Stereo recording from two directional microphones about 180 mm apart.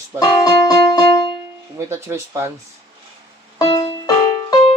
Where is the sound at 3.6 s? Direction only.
20° left (ahead or behind).